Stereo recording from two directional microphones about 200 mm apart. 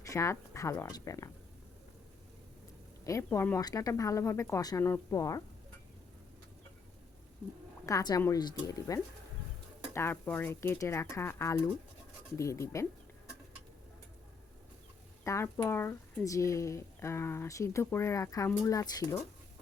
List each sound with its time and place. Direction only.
0.0 s speech: 15° left (ahead or behind)
3.1 s speech: 15° left (ahead or behind)
7.9 s speech: 15° left (ahead or behind)
15.2 s speech: 15° left (ahead or behind)